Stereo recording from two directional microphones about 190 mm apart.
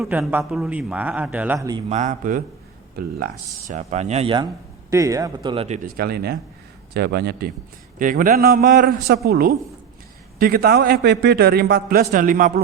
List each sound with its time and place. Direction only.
0.0 s a man's voice: 5° right (ahead or behind)
1.9 s speech: 40° right (ahead or behind)
2.9 s speech: 50° right (ahead or behind)
3.7 s speech: 40° right (ahead or behind)
4.9 s a man's voice: 15° right (ahead or behind)
5.6 s speech: 35° right (ahead or behind)
6.0 s speech: 55° right (ahead or behind)
7.9 s a man's voice: 45° right (ahead or behind)